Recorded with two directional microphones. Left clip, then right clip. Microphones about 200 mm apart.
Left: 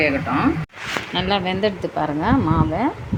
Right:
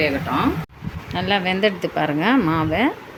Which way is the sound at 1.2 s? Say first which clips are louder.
Right 2 dB; 5° right (ahead or behind).